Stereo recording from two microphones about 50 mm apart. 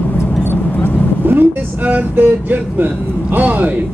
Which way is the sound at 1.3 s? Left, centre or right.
Right.